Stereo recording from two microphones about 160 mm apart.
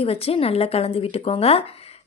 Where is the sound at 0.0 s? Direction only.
40° left (ahead or behind).